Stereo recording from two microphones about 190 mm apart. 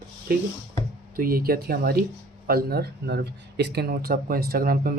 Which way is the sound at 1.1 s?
50° right (ahead or behind).